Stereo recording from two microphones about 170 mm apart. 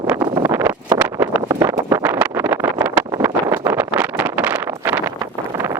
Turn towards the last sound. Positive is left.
turn(degrees=-10)  # may be behind; listen again after turning